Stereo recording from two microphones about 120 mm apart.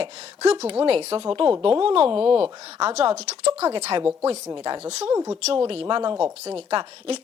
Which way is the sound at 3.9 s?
45° right (ahead or behind).